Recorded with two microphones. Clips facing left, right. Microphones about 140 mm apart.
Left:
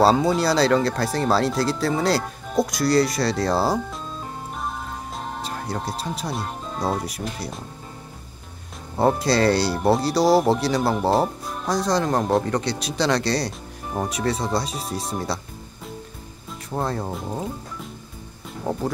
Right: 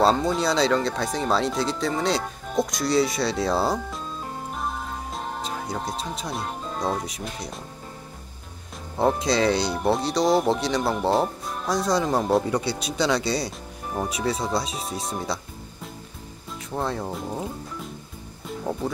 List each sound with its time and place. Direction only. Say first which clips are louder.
0.0 s speech: left 3 dB; 5° left (ahead or behind)
4.6 s music: even; centre (ahead or behind)
8.9 s speech: left 2 dB; 5° left (ahead or behind)
18.7 s speech: left 3 dB; 20° left (ahead or behind)